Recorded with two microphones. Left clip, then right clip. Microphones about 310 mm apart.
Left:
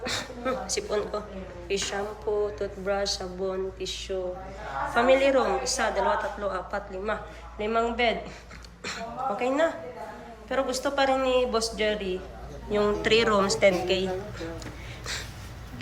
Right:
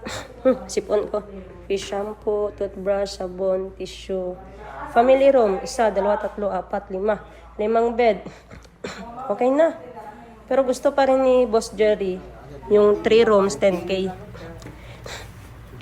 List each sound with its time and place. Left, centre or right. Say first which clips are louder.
0.0 s a woman's voice: right 8 dB; centre